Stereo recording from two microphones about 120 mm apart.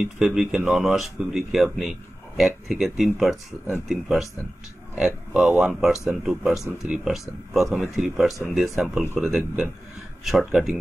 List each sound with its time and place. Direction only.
0.0 s speech: 5° right (ahead or behind)